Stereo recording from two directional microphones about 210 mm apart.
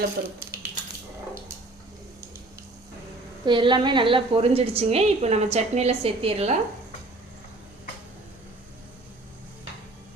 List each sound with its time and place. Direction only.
0.2 s speech: 45° right (ahead or behind)
3.4 s a woman's voice: 20° right (ahead or behind)